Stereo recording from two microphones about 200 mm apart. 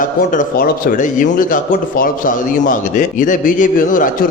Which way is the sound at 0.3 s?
45° left (ahead or behind).